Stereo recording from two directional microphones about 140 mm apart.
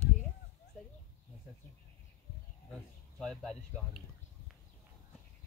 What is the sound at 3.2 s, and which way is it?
Speech, 5° left (ahead or behind).